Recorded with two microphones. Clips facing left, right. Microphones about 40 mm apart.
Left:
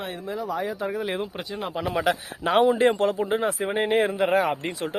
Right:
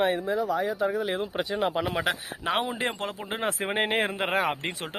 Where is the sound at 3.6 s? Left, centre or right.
Right.